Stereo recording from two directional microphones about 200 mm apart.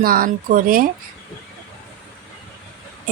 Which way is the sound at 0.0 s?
45° right (ahead or behind).